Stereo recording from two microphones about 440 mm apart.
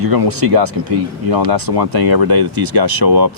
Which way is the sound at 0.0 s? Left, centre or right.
Right.